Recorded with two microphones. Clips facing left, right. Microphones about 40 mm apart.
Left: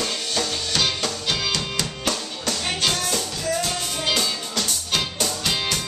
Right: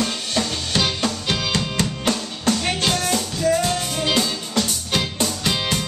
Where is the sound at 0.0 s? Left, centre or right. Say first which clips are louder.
Right 2 dB; centre.